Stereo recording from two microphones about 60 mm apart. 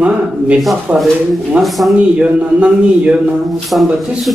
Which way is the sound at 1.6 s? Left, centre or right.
Centre.